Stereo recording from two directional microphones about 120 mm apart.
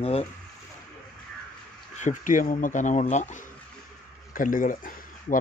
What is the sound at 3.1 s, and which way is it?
Speech, 80° left.